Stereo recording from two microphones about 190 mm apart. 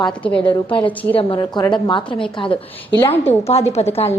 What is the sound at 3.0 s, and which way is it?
Speech, 10° left (ahead or behind).